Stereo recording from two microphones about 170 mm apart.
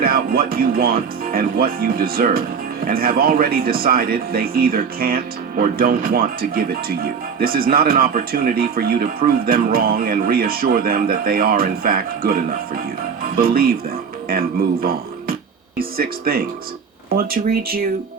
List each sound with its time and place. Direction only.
0.0 s speech: 60° right (ahead or behind)